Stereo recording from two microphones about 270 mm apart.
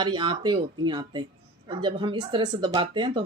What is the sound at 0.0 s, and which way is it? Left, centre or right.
A woman's voice, centre.